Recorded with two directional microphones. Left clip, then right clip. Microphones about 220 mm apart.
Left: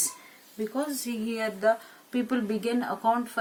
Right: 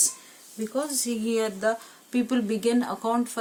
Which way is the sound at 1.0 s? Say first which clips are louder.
Right 5 dB; 50° right (ahead or behind).